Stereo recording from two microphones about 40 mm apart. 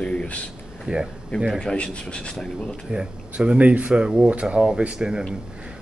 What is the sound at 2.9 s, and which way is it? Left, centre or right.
Speech, right.